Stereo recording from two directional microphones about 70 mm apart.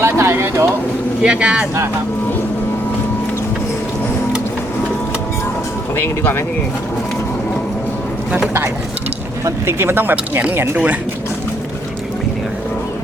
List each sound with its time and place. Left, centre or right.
0.0 s a sound: right
1.2 s speech: centre
9.4 s speech: right